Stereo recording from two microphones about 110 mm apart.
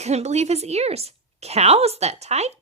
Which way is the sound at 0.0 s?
85° right.